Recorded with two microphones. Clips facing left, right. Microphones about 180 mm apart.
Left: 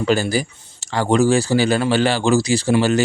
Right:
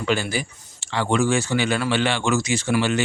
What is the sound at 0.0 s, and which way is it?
Speech, 40° left (ahead or behind).